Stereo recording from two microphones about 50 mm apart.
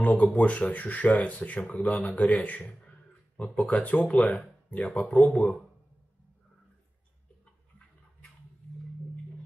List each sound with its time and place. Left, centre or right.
0.0 s speech: left